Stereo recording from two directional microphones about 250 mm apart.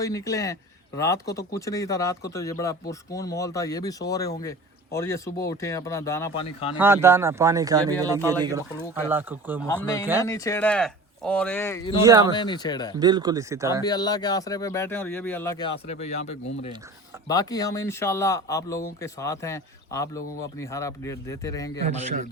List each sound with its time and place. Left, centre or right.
0.0 s speech: centre
6.7 s speech: centre
9.6 s speech: centre
12.0 s speech: centre
12.3 s speech: centre
13.0 s speech: centre
13.8 s speech: centre
15.9 s speech: left
17.2 s speech: centre